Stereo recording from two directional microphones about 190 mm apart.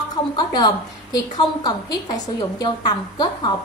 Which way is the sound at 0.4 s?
20° left (ahead or behind).